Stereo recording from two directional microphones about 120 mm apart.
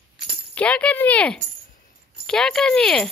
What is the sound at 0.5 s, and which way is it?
Speech, 10° left (ahead or behind).